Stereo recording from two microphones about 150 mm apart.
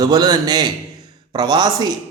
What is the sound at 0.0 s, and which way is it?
A man's voice, 25° right (ahead or behind).